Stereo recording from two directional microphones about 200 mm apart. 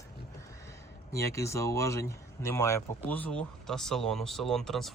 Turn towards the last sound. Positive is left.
turn(degrees=0)  # may be behind; listen again after turning